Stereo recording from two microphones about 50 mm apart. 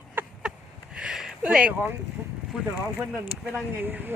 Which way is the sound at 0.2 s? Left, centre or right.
Right.